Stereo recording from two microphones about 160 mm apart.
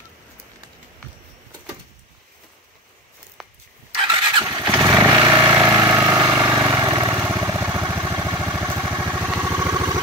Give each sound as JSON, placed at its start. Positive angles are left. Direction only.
{"t": 3.4, "sound": "a sound", "side_deg": 0}
{"t": 3.9, "sound": "vehicle", "side_deg": -30}
{"t": 4.6, "sound": "vehicle", "side_deg": -10}